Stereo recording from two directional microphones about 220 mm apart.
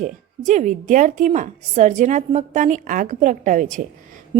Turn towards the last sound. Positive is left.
turn(degrees=-25)  # may be behind; listen again after turning